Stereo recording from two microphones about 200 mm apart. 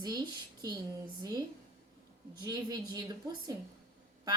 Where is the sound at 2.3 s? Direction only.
20° right (ahead or behind).